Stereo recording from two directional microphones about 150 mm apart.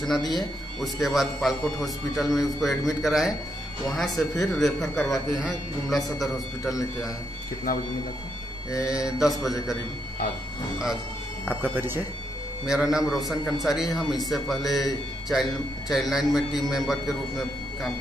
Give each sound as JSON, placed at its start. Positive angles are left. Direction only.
{"t": 0.3, "sound": "speech", "side_deg": 0}
{"t": 8.8, "sound": "speech", "side_deg": -5}
{"t": 11.4, "sound": "speech", "side_deg": -10}
{"t": 12.6, "sound": "speech", "side_deg": -5}